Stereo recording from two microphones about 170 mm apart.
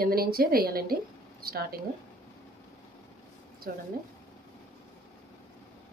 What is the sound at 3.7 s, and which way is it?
Speech, 60° right (ahead or behind).